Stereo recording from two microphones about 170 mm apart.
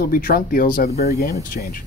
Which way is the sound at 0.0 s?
55° left (ahead or behind).